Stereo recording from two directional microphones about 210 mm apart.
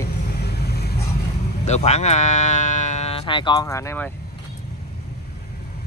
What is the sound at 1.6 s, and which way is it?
Speech, 30° left (ahead or behind).